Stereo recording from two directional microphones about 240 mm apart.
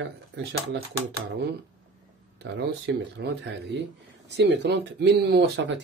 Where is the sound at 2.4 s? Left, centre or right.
Right.